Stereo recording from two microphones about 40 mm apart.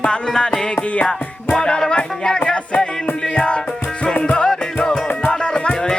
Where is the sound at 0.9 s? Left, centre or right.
Left.